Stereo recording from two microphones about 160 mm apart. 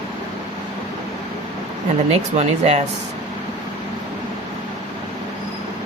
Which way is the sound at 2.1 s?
40° right (ahead or behind).